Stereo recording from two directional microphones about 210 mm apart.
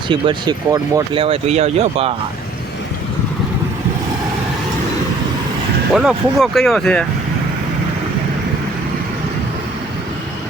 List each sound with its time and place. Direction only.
0.1 s speech: 20° right (ahead or behind)
5.9 s speech: 5° right (ahead or behind)